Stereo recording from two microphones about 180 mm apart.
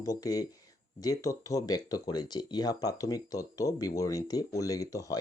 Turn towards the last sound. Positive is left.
turn(degrees=20)  # may be behind; listen again after turning